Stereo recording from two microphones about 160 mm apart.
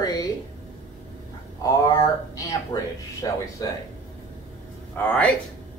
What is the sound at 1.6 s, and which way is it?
Speech, 20° left (ahead or behind).